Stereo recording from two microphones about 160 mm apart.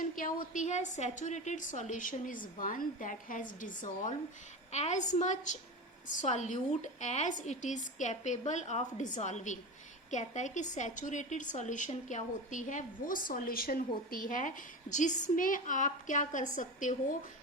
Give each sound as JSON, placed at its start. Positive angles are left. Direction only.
{"t": 0.0, "sound": "a woman's voice", "side_deg": 60}